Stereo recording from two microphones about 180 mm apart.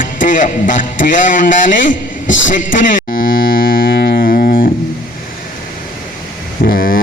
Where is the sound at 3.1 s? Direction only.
50° left (ahead or behind).